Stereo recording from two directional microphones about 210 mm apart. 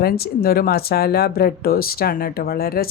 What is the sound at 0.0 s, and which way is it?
Speech, 45° left (ahead or behind).